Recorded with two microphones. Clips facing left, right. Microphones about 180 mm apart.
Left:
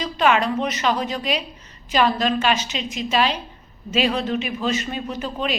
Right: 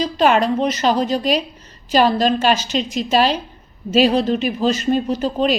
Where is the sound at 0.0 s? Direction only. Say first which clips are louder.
Right 4 dB; 35° right (ahead or behind).